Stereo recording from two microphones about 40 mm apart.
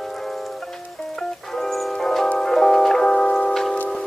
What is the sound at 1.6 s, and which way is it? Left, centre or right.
Music, centre.